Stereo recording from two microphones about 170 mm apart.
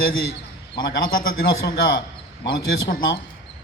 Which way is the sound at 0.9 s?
65° left (ahead or behind).